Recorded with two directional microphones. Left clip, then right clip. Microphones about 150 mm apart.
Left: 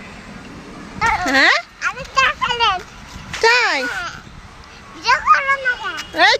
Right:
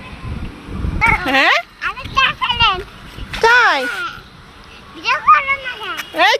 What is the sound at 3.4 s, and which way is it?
Speech, centre (ahead or behind).